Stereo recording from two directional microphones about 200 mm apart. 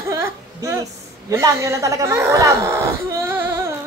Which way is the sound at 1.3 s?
15° right (ahead or behind).